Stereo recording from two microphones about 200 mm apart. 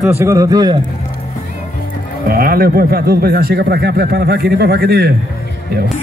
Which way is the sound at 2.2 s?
45° right (ahead or behind).